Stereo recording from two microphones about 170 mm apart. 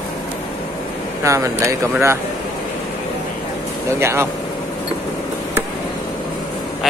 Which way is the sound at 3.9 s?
15° right (ahead or behind).